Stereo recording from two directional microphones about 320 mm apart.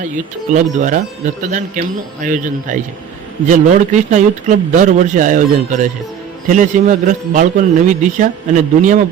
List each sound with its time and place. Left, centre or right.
0.5 s speech: right